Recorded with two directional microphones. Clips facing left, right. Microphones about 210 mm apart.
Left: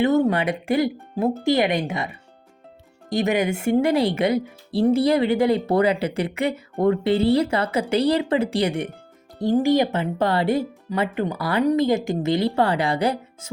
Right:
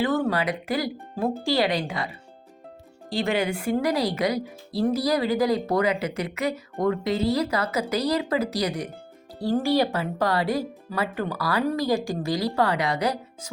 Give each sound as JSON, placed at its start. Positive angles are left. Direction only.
{"t": 0.0, "sound": "speech", "side_deg": 25}
{"t": 3.1, "sound": "speech", "side_deg": 20}